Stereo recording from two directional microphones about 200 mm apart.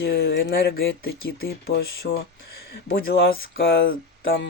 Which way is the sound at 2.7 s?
50° left (ahead or behind).